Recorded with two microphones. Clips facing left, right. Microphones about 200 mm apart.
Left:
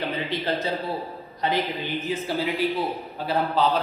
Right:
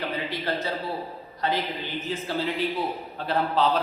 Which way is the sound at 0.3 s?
20° left (ahead or behind).